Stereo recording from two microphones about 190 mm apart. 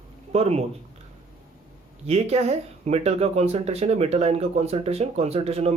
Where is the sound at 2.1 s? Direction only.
35° right (ahead or behind).